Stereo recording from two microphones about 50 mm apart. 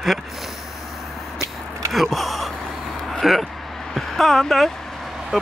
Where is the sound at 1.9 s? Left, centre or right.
Centre.